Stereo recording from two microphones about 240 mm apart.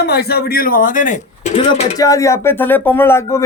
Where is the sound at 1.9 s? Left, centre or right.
Centre.